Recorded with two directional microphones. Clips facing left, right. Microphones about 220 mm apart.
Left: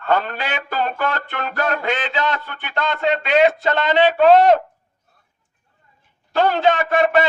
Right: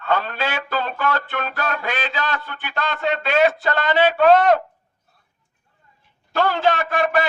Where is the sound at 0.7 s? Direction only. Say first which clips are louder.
Left 2 dB; 45° left (ahead or behind).